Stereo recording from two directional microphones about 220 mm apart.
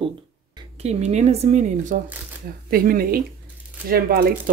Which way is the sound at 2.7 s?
40° right (ahead or behind).